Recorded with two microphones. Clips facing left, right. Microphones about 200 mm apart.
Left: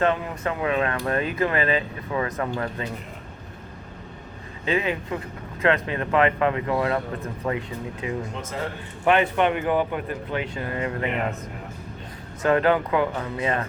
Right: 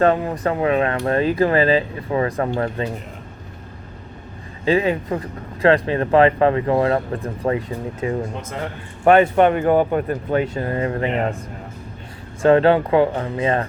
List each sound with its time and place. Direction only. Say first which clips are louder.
0.0 s speech: right 6 dB; 35° right (ahead or behind)
4.6 s speech: right 7 dB; 35° right (ahead or behind)
12.4 s speech: right 6 dB; 30° right (ahead or behind)